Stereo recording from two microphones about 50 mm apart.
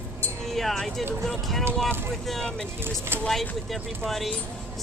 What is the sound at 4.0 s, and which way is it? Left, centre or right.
Speech, centre.